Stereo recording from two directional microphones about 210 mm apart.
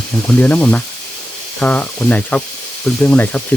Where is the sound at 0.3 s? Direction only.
5° left (ahead or behind).